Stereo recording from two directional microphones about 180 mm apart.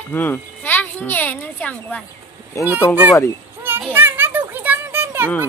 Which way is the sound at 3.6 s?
10° right (ahead or behind).